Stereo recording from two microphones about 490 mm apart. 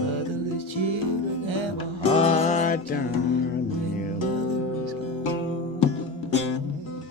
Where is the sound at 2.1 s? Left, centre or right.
Centre.